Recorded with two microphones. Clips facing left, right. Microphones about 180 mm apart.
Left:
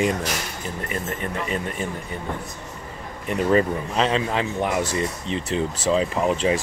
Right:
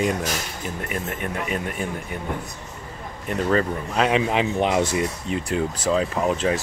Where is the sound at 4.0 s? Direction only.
15° right (ahead or behind).